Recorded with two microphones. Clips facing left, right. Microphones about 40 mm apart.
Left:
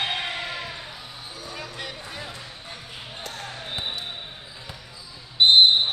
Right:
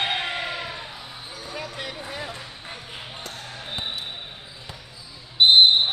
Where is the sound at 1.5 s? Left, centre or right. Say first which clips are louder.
Right 3 dB; centre.